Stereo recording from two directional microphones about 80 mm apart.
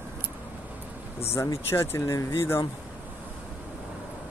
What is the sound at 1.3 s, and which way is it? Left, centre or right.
Speech, left.